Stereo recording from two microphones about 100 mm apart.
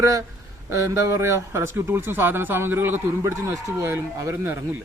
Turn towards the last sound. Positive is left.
turn(degrees=-25)  # may be behind; listen again after turning